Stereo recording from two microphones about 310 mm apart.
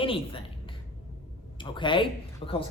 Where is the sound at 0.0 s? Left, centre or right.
Centre.